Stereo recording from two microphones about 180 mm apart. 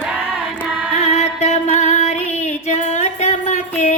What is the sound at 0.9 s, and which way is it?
Female singing, 35° left (ahead or behind).